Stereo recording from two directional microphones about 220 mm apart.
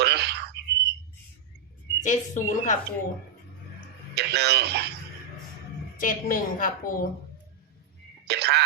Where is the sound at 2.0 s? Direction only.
35° left (ahead or behind).